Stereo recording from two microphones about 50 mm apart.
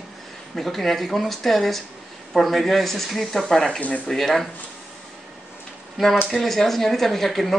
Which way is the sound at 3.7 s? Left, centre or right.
Left.